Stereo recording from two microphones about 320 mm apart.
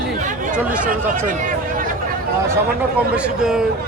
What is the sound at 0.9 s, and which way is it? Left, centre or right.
Speech, right.